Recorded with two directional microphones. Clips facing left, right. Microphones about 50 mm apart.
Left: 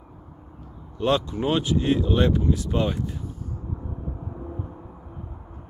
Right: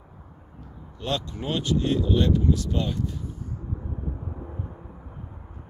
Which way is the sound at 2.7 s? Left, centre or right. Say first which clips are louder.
Left 4 dB; left.